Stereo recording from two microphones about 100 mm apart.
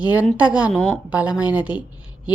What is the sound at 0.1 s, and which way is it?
A woman's voice, 15° right (ahead or behind).